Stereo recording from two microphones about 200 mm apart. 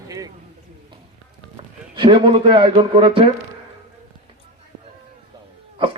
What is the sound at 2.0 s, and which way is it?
A man's voice, 25° right (ahead or behind).